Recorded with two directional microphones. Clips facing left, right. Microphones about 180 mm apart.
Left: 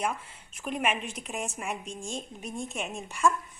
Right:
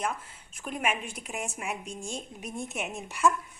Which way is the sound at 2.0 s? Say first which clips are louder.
Left 2 dB; 15° right (ahead or behind).